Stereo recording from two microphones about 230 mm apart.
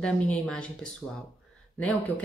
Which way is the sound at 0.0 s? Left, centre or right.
Centre.